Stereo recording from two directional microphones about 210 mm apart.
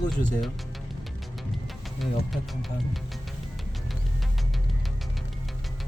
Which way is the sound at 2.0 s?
Centre (ahead or behind).